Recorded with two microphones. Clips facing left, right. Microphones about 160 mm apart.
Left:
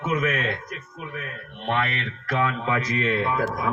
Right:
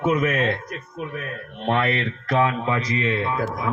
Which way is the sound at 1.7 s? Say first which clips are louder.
Right 4 dB; 35° right (ahead or behind).